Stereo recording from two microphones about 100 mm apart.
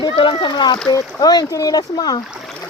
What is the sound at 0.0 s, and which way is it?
Splash, 60° left (ahead or behind).